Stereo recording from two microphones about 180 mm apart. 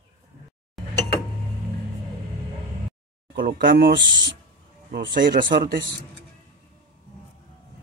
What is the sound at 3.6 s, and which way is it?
Speech, 80° right.